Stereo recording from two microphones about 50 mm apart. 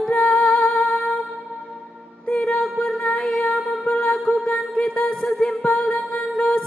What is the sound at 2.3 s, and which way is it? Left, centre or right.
Music, left.